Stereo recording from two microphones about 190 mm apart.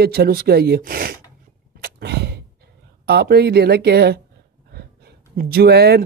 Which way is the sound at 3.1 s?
60° right (ahead or behind).